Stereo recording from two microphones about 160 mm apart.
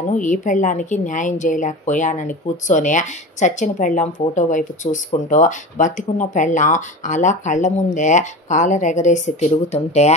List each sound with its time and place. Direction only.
0.1 s speech: 50° left (ahead or behind)